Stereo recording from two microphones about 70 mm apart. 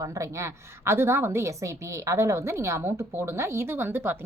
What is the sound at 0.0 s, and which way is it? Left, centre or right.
A woman's voice, right.